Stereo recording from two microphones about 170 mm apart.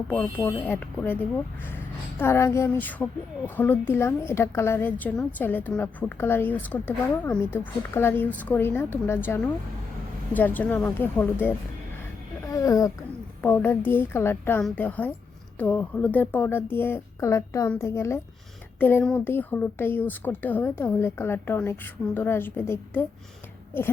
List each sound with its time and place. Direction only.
0.6 s a woman's voice: 10° left (ahead or behind)
12.5 s a sound: 20° left (ahead or behind)
13.4 s a woman's voice: 10° left (ahead or behind)